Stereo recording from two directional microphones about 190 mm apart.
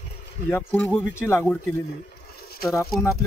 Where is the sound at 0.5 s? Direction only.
10° left (ahead or behind).